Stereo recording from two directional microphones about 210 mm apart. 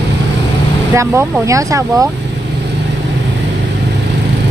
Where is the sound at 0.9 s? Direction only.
15° right (ahead or behind).